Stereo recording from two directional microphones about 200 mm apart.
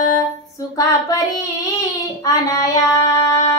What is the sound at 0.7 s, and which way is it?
Child singing, 15° left (ahead or behind).